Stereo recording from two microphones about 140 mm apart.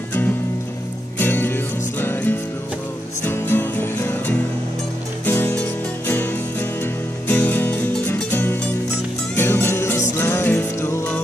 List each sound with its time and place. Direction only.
1.1 s music: 15° left (ahead or behind)
5.2 s music: 15° left (ahead or behind)